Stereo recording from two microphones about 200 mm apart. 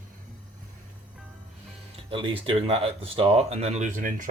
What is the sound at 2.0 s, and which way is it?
Speech, 25° right (ahead or behind).